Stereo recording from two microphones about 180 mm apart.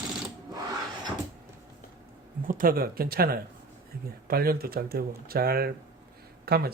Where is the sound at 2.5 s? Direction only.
50° right (ahead or behind).